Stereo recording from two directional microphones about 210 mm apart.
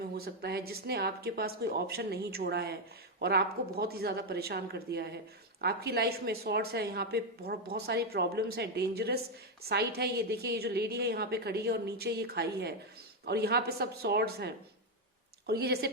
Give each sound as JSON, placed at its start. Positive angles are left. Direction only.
{"t": 0.2, "sound": "a woman's voice", "side_deg": -50}